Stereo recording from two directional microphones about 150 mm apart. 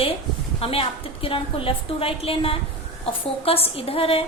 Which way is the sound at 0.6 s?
40° left (ahead or behind).